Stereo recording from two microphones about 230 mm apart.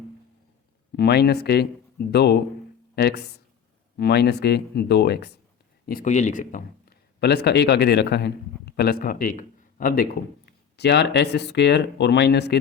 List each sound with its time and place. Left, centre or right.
0.9 s a man's voice: left